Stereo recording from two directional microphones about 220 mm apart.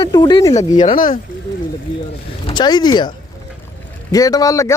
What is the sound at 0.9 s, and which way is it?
Speech, 40° left (ahead or behind).